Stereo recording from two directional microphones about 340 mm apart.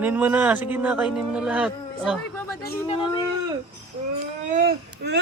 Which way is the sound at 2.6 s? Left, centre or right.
Centre.